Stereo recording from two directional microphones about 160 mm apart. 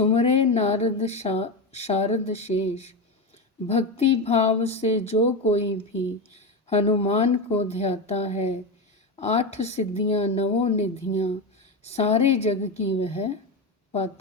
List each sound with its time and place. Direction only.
0.0 s a woman's voice: 40° left (ahead or behind)